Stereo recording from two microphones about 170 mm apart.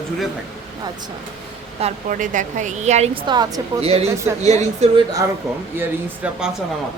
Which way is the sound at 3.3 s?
25° right (ahead or behind).